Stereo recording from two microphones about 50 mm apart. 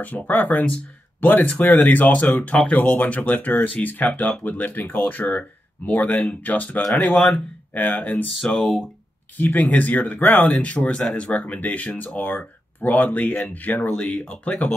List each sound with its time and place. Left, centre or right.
0.0 s speech: left
2.4 s speech: left
2.7 s speech: left
8.5 s speech: centre
9.4 s speech: left
10.4 s speech: left